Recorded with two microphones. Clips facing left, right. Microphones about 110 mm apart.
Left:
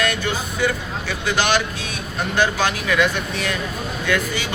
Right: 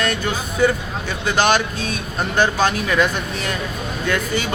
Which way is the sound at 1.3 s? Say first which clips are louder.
Right 3 dB; 40° right (ahead or behind).